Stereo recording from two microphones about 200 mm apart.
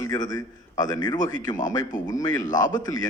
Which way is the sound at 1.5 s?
40° left (ahead or behind).